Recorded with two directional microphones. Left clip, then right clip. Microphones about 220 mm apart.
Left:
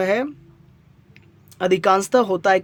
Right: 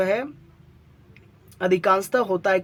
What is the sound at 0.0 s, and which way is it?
Speech, 45° left (ahead or behind).